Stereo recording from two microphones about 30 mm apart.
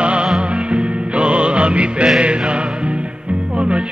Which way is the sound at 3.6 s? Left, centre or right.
Right.